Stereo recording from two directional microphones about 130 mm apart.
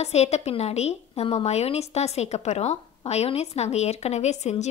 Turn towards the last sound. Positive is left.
turn(degrees=60)  # may be behind; listen again after turning